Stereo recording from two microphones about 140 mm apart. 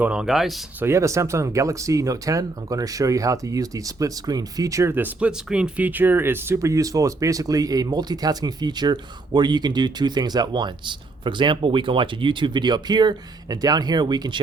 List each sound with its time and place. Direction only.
0.0 s speech: 5° right (ahead or behind)
0.8 s speech: 20° right (ahead or behind)